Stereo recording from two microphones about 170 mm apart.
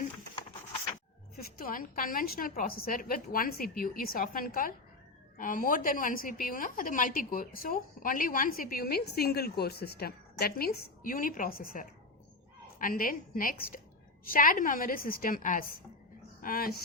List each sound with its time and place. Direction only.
1.4 s a woman's voice: 55° left (ahead or behind)